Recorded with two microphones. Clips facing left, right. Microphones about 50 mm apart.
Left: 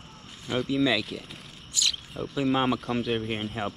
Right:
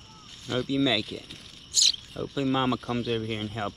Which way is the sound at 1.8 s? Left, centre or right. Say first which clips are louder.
Right 1 dB; centre.